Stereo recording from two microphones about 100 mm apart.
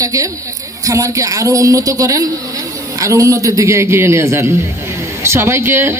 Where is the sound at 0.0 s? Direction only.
35° right (ahead or behind).